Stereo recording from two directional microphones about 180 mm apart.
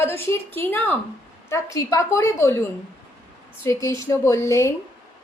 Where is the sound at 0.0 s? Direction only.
10° left (ahead or behind).